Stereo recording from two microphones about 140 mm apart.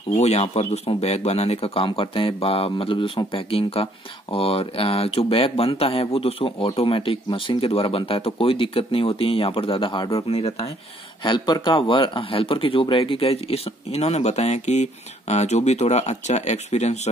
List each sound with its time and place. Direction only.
0.2 s speech: 50° left (ahead or behind)
11.2 s speech: 30° left (ahead or behind); by 17.1 s 50° left (ahead or behind)